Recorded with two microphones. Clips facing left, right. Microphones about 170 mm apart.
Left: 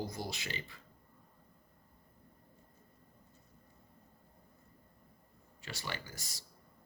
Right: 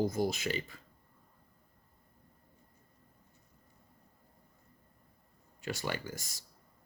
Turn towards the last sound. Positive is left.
turn(degrees=-45)  # may be behind; listen again after turning